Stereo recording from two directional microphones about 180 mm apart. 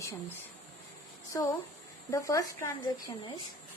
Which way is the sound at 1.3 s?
20° left (ahead or behind).